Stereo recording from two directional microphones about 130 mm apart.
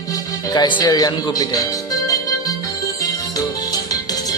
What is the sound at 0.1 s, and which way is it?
Speech, 30° left (ahead or behind).